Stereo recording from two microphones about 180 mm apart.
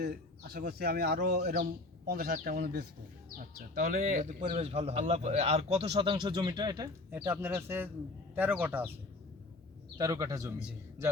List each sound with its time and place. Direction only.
0.0 s speech: 65° right (ahead or behind)
2.0 s a man's voice: 55° right (ahead or behind); by 8.9 s 10° right (ahead or behind)
10.0 s a man's voice: 20° right (ahead or behind)